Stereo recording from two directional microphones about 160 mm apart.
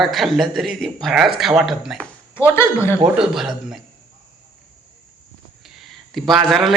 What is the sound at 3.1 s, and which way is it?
Speech, 5° right (ahead or behind).